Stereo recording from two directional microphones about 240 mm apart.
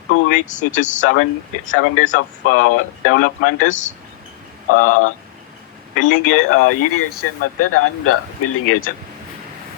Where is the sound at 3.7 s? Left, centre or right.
Left.